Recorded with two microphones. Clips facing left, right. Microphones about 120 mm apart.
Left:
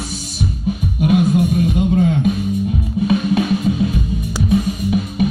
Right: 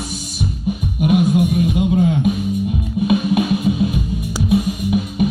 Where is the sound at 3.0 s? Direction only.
15° right (ahead or behind).